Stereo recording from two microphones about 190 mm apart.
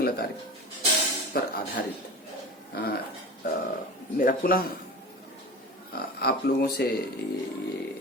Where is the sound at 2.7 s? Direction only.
55° left (ahead or behind).